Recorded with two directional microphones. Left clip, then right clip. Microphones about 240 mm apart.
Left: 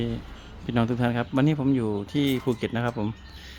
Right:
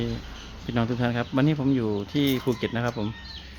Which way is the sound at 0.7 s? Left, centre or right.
Centre.